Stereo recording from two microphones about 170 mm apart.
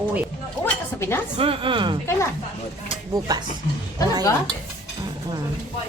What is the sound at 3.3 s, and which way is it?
Speech, 20° right (ahead or behind).